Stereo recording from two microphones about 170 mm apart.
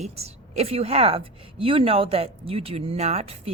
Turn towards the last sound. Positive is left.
turn(degrees=-40)  # may be behind; listen again after turning